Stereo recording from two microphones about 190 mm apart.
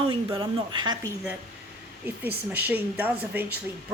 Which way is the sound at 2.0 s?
10° right (ahead or behind).